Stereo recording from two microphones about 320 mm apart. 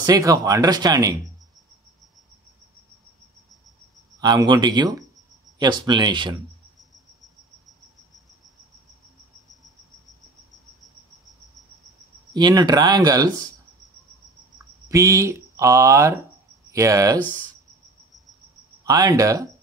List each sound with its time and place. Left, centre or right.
0.0 s speech: centre
4.2 s speech: centre
12.4 s speech: centre
14.9 s speech: centre
17.2 s speech: centre
18.9 s speech: centre